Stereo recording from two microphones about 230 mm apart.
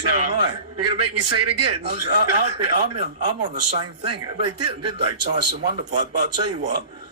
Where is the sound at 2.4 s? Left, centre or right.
Right.